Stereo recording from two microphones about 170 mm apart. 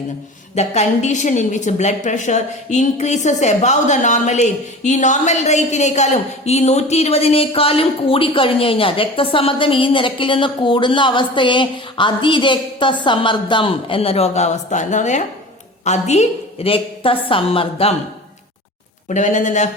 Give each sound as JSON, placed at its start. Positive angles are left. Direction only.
{"t": 0.5, "sound": "a woman's voice", "side_deg": 40}
{"t": 19.0, "sound": "speech", "side_deg": 45}